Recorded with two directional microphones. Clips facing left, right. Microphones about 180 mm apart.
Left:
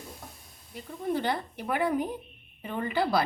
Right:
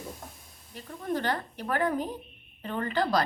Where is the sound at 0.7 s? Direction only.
10° left (ahead or behind).